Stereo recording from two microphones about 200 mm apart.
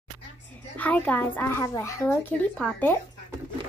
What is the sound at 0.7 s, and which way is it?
A child's voice, 5° left (ahead or behind).